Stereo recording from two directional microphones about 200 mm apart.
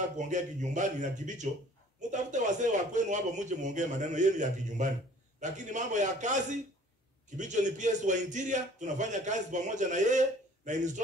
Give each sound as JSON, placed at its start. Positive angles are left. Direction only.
{"t": 0.2, "sound": "speech", "side_deg": -40}